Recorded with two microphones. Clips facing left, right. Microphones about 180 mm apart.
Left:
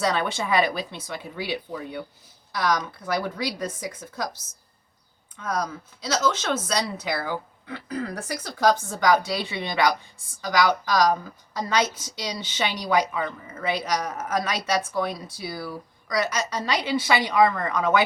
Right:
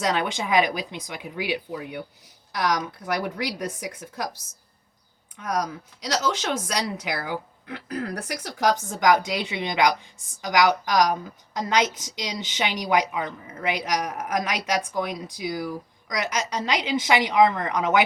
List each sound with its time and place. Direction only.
0.0 s a woman's voice: 15° right (ahead or behind)
5.4 s a woman's voice: 15° right (ahead or behind)